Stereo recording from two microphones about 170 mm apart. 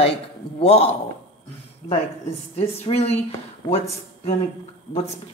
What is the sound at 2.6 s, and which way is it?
Speech, 40° left (ahead or behind).